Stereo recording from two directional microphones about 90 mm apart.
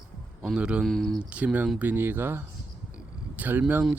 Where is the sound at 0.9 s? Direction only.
5° left (ahead or behind).